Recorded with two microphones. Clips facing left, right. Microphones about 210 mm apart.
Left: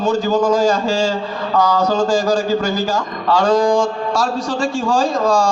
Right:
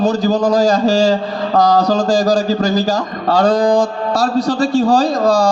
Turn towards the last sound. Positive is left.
turn(degrees=-35)  # may be behind; listen again after turning